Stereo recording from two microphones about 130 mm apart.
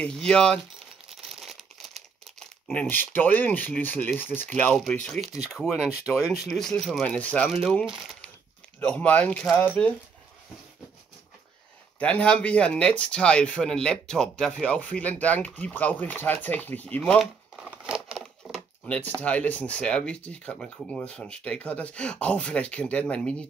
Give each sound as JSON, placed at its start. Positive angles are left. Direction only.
{"t": 0.0, "sound": "speech", "side_deg": 5}
{"t": 1.3, "sound": "crumpling", "side_deg": 0}
{"t": 2.7, "sound": "speech", "side_deg": 10}
{"t": 7.8, "sound": "speech", "side_deg": -5}
{"t": 8.7, "sound": "speech", "side_deg": 10}
{"t": 12.0, "sound": "speech", "side_deg": 10}
{"t": 17.6, "sound": "crumpling", "side_deg": -10}
{"t": 19.2, "sound": "speech", "side_deg": 10}